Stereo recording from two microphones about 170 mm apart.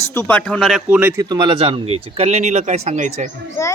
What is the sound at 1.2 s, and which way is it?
Speech, 25° right (ahead or behind).